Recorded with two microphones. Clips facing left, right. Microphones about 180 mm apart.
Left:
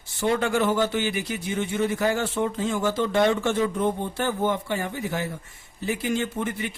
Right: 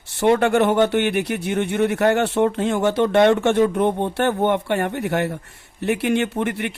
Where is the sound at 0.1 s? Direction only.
65° right (ahead or behind).